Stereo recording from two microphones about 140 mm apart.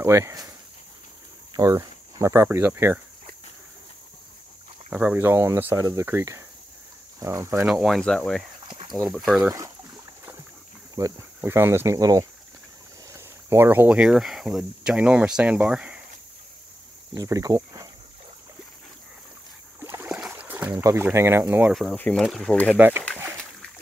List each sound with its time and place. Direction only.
0.0 s speech: 20° right (ahead or behind)
1.5 s speech: 25° right (ahead or behind)
4.8 s speech: 10° right (ahead or behind)
7.6 s speech: 5° right (ahead or behind)
8.6 s a sound: 40° right (ahead or behind)
8.9 s speech: centre (ahead or behind)
11.0 s speech: 20° right (ahead or behind); by 16.0 s 5° right (ahead or behind)
17.1 s speech: 25° right (ahead or behind)
19.8 s boat: 20° right (ahead or behind)
20.1 s boat: 10° right (ahead or behind)
20.7 s speech: 20° right (ahead or behind)
21.9 s speech: 10° left (ahead or behind)
22.8 s speech: 15° right (ahead or behind)
23.1 s splash: 20° right (ahead or behind)